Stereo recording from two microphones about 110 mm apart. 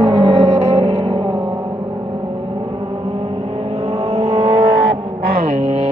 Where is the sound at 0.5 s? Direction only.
70° right (ahead or behind); by 1.5 s 45° right (ahead or behind).